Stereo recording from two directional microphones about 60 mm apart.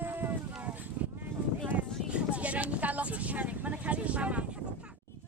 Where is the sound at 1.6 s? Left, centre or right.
Right.